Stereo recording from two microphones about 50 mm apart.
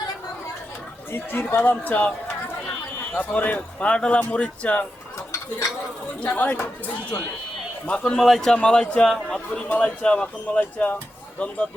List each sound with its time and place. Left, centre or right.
1.1 s speech: left
1.6 s speech: left
3.2 s speech: left
6.2 s speech: left
8.2 s a man's voice: centre
8.5 s a man's voice: centre